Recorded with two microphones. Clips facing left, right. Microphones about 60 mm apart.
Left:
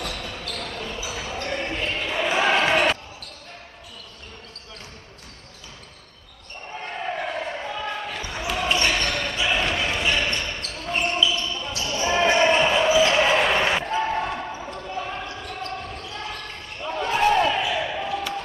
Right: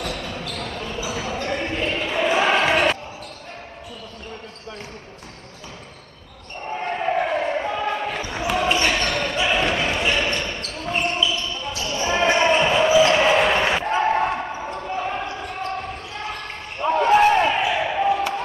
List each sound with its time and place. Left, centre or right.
0.1 s basketball bounce: centre
6.8 s basketball bounce: right
8.5 s basketball bounce: centre
9.1 s basketball bounce: right; by 13.8 s centre
13.8 s basketball bounce: right
16.8 s basketball bounce: right